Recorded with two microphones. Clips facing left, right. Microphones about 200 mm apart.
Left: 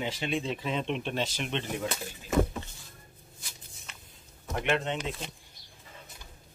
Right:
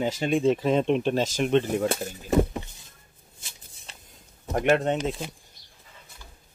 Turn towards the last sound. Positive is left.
turn(degrees=-40)  # may be behind; listen again after turning